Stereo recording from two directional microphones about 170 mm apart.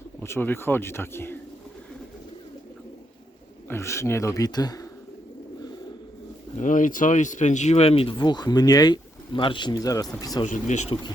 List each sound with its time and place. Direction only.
0.2 s speech: 15° left (ahead or behind)
3.7 s speech: 15° left (ahead or behind)
6.6 s speech: 50° left (ahead or behind); by 10.4 s 20° left (ahead or behind)
10.4 s speech: 45° left (ahead or behind)